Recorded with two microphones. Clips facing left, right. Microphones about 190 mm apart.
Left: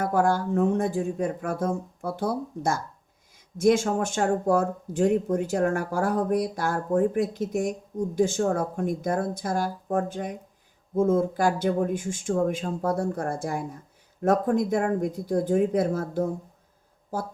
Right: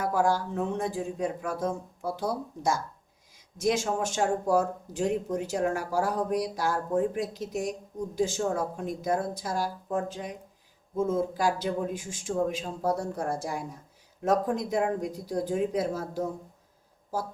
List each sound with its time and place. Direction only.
0.0 s speech: 55° left (ahead or behind)